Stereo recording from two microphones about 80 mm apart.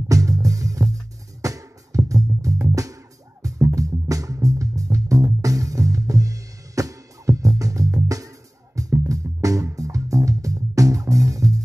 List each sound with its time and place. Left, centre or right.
0.1 s music: right